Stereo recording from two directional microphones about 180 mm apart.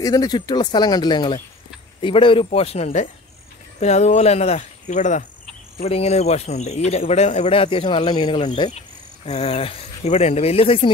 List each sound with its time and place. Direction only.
0.0 s speech: 20° left (ahead or behind)